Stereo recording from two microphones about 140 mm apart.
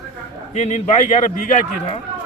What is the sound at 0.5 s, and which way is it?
Speech, 55° left (ahead or behind).